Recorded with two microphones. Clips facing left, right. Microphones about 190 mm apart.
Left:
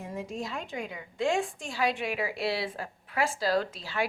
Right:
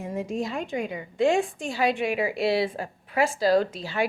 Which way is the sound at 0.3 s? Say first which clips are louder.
Right 6 dB; 15° right (ahead or behind).